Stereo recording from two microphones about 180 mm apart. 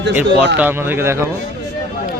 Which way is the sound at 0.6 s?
10° right (ahead or behind).